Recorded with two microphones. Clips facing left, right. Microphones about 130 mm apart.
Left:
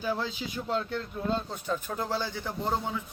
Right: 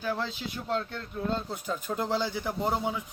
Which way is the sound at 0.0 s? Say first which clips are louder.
Left 1 dB; 5° left (ahead or behind).